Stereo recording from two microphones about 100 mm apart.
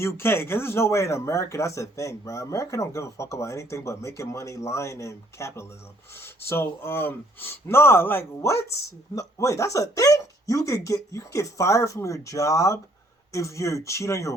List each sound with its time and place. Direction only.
0.0 s speech: 25° left (ahead or behind)